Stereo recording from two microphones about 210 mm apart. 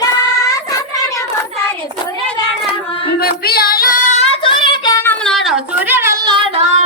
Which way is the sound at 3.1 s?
45° left (ahead or behind).